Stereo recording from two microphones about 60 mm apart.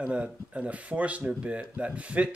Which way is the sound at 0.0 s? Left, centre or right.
Right.